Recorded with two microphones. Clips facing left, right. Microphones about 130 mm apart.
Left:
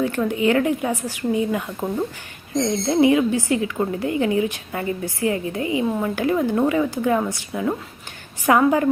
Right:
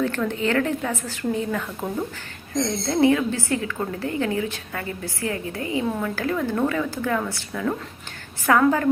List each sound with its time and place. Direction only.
0.0 s a woman's voice: 15° left (ahead or behind)